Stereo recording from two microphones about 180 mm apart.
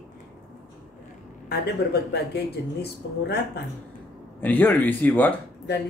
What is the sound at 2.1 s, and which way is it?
A woman's voice, 65° left (ahead or behind).